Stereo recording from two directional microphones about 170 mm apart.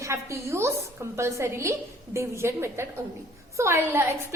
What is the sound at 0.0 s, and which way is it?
A woman's voice, 15° right (ahead or behind).